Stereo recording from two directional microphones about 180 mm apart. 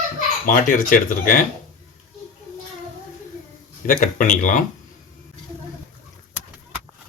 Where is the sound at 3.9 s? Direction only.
50° left (ahead or behind).